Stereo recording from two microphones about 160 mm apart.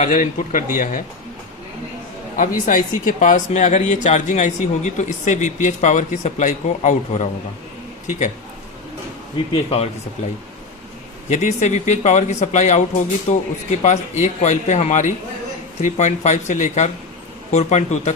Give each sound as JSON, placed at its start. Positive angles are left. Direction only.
{"t": 0.0, "sound": "a man's voice", "side_deg": 50}
{"t": 2.4, "sound": "speech", "side_deg": 55}
{"t": 9.5, "sound": "speech", "side_deg": 40}
{"t": 11.3, "sound": "speech", "side_deg": 45}